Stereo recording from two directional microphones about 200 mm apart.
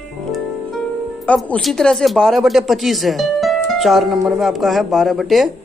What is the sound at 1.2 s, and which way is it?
Speech, 5° left (ahead or behind).